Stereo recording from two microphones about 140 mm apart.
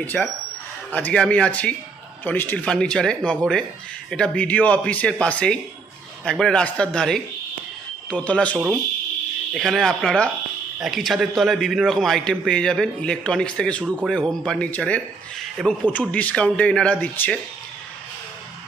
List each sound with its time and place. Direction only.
0.0 s a man's voice: 10° left (ahead or behind)